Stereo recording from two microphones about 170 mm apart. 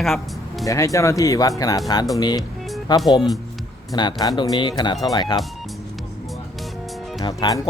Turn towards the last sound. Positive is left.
turn(degrees=25)  # may be behind; listen again after turning